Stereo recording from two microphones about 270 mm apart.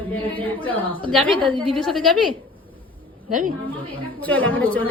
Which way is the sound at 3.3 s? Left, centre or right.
Right.